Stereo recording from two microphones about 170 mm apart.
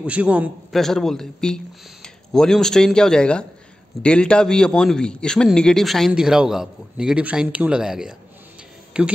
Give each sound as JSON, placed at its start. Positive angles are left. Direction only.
{"t": 0.0, "sound": "a man's voice", "side_deg": -5}